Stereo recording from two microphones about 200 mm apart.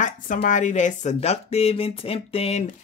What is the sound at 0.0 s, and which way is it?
Speech, 40° left (ahead or behind).